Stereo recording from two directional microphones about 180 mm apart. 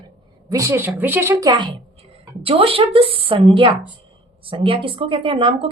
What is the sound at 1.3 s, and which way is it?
A woman's voice, 20° right (ahead or behind).